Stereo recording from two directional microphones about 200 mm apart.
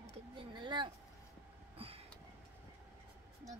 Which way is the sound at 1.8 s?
30° right (ahead or behind).